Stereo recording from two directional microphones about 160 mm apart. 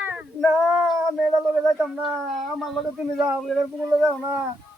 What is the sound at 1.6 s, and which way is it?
Speech, centre (ahead or behind).